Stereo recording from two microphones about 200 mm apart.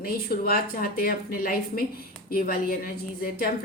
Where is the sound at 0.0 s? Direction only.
50° left (ahead or behind).